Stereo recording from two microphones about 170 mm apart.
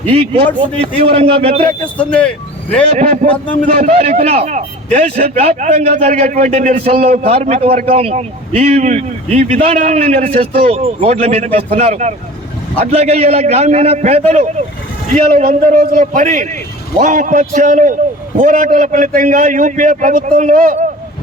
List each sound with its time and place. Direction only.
0.6 s speech: 35° right (ahead or behind)
1.8 s speech: 5° left (ahead or behind)
2.9 s a man's voice: 45° right (ahead or behind)
3.2 s a man's voice: 10° left (ahead or behind)
3.8 s speech: 40° right (ahead or behind)
15.1 s a man's voice: 50° right (ahead or behind)